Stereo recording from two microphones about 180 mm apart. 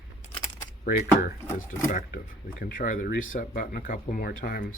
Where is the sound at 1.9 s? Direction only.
45° left (ahead or behind).